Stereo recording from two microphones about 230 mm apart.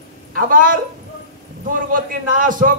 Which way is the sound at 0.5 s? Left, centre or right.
Right.